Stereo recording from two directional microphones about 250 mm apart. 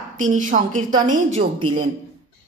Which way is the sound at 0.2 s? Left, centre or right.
Right.